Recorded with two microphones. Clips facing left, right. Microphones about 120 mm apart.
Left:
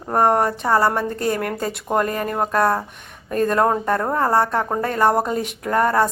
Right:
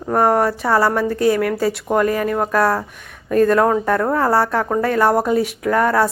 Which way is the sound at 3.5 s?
5° left (ahead or behind).